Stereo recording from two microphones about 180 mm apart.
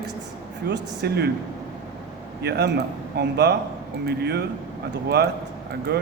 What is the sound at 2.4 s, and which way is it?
A man's voice, 65° right (ahead or behind).